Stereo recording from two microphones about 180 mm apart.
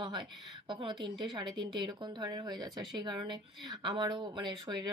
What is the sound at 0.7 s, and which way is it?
Speech, 25° right (ahead or behind).